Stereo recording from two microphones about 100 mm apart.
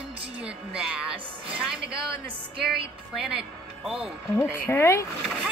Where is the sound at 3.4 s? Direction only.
5° right (ahead or behind).